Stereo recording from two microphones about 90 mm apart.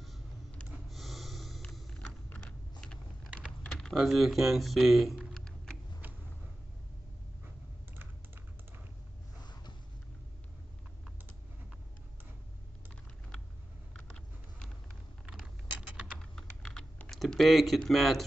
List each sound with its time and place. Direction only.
0.8 s gasp: centre (ahead or behind)
1.6 s music: 5° left (ahead or behind)
2.2 s a sound: 15° left (ahead or behind)
3.8 s speech: centre (ahead or behind)
7.4 s typing: 25° right (ahead or behind)
9.4 s sniff: 55° left (ahead or behind)
13.9 s a sound: 10° left (ahead or behind)
16.2 s typing: 10° left (ahead or behind)